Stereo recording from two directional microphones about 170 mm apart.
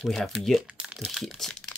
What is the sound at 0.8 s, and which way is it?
Crumpling, centre (ahead or behind).